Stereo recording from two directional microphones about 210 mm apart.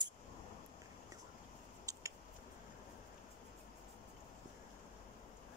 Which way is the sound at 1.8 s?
15° right (ahead or behind).